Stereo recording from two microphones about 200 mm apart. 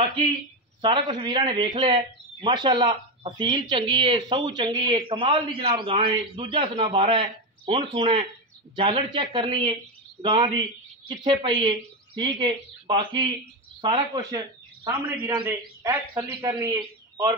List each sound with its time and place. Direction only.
1.1 s a man's voice: 20° right (ahead or behind)
14.9 s a man's voice: 10° right (ahead or behind)